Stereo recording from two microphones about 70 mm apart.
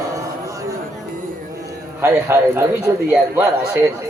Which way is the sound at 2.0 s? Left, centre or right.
Right.